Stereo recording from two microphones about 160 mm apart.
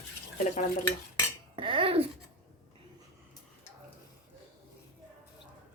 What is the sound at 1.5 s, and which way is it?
Dishes, 35° right (ahead or behind).